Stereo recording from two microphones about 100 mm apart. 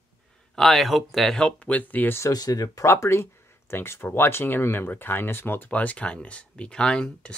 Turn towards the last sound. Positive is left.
turn(degrees=10)  # may be behind; listen again after turning